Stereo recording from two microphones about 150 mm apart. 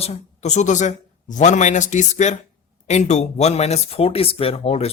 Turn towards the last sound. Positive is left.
turn(degrees=40)  # may be behind; listen again after turning